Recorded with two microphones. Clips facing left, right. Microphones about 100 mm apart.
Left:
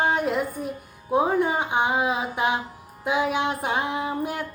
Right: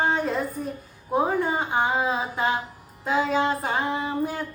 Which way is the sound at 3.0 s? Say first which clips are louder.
Right 1 dB; 15° left (ahead or behind).